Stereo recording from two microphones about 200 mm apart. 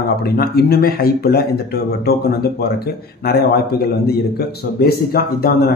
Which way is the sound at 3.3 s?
50° left (ahead or behind).